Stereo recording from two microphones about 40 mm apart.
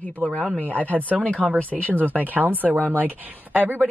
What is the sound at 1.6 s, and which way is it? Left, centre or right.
Speech, left.